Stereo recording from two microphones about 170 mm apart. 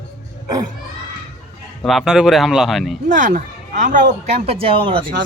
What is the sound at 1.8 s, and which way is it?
Speech, centre (ahead or behind).